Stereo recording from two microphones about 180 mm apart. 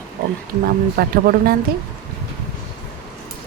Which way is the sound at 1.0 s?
55° right (ahead or behind).